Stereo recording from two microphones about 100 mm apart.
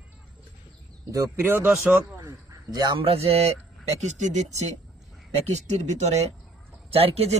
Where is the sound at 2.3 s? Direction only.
40° right (ahead or behind).